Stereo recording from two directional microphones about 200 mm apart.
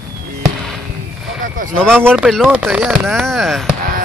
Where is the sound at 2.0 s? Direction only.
5° right (ahead or behind).